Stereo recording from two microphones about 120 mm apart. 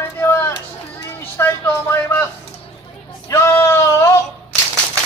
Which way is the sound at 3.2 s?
25° left (ahead or behind).